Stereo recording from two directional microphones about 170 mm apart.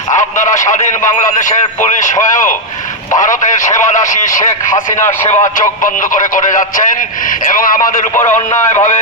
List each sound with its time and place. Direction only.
0.1 s a sound: 45° left (ahead or behind)
1.2 s speech: 45° left (ahead or behind)
8.1 s a man's voice: 15° left (ahead or behind)
8.7 s speech: 45° left (ahead or behind)